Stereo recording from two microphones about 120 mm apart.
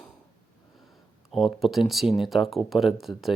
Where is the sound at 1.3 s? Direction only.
Centre (ahead or behind).